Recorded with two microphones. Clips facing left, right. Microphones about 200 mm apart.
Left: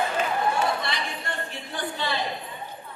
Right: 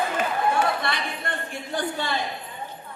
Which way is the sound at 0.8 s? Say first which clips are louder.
Right 2 dB; 55° right (ahead or behind).